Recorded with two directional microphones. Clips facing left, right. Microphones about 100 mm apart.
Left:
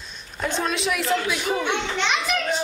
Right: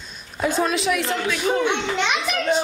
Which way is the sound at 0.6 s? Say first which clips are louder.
Right 3 dB; centre (ahead or behind).